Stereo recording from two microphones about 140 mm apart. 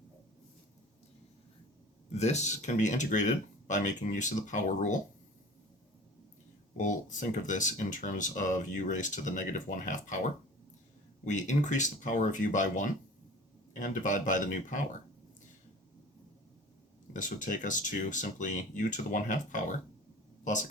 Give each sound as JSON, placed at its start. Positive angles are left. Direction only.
{"t": 2.1, "sound": "speech", "side_deg": 55}
{"t": 6.7, "sound": "speech", "side_deg": 65}
{"t": 17.2, "sound": "speech", "side_deg": 65}